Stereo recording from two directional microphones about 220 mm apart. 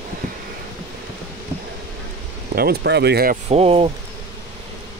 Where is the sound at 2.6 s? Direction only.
50° right (ahead or behind).